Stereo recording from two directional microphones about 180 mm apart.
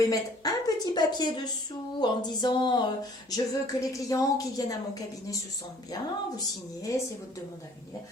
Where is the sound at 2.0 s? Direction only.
25° left (ahead or behind).